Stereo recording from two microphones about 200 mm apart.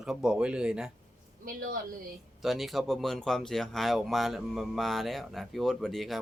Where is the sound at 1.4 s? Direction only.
45° right (ahead or behind).